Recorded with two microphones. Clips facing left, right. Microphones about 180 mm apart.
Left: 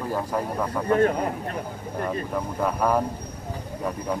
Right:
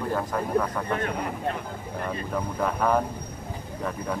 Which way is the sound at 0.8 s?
40° left (ahead or behind).